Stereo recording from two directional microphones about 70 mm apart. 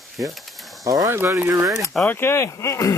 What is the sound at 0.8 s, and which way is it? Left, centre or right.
Speech, right.